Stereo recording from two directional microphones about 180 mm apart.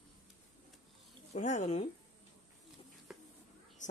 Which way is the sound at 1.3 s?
40° left (ahead or behind).